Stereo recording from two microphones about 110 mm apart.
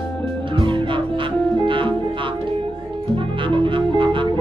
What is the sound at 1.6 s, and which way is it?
Music, 50° right (ahead or behind).